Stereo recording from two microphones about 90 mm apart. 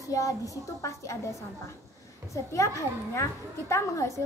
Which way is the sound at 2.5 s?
35° left (ahead or behind).